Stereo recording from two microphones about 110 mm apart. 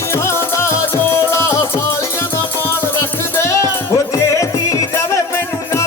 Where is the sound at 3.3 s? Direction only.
25° left (ahead or behind).